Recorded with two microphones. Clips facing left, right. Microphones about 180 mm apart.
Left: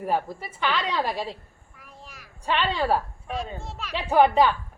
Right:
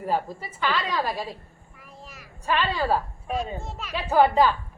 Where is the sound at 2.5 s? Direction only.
20° left (ahead or behind).